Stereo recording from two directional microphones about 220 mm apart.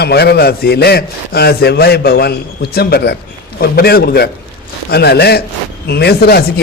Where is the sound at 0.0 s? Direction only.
45° left (ahead or behind).